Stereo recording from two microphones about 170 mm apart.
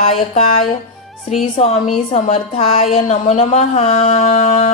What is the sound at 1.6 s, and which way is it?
A woman's voice, 35° left (ahead or behind).